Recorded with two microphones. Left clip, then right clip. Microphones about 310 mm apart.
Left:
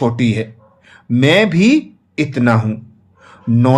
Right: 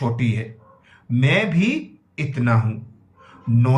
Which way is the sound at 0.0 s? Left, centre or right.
Centre.